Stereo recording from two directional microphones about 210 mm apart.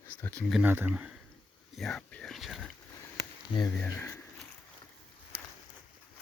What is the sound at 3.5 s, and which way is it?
Speech, 15° left (ahead or behind).